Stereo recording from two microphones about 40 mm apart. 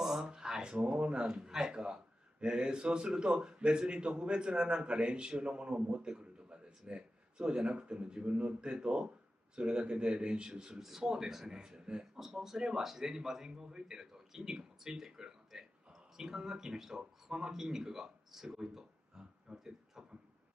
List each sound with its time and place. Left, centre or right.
0.2 s a man's voice: centre
12.2 s a man's voice: centre